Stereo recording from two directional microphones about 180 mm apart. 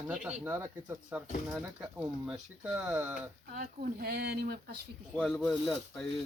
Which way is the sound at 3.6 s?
60° right (ahead or behind).